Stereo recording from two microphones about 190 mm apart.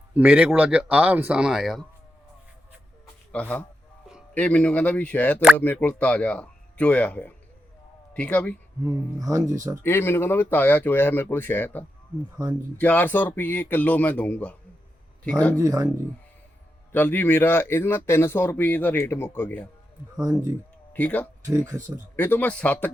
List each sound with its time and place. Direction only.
0.1 s speech: 10° right (ahead or behind)
3.3 s speech: 10° left (ahead or behind)
8.8 s speech: 15° right (ahead or behind)
9.8 s speech: 10° left (ahead or behind)
12.4 s speech: 15° right (ahead or behind)
12.8 s speech: 10° left (ahead or behind)
15.5 s speech: 15° right (ahead or behind)
16.9 s speech: 10° left (ahead or behind)
20.1 s speech: 15° right (ahead or behind)
20.9 s speech: 10° left (ahead or behind)